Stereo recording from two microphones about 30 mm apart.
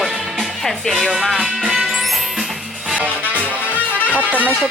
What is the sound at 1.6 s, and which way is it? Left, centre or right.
Music, centre.